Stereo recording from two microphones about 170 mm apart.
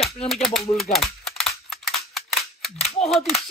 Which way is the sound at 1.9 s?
Centre (ahead or behind).